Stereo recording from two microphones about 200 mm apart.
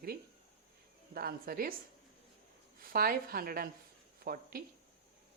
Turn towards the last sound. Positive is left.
turn(degrees=-50)  # may be behind; listen again after turning